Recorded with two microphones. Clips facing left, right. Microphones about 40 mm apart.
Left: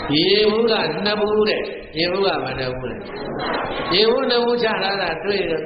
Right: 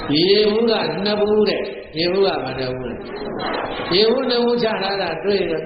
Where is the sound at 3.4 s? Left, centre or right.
Centre.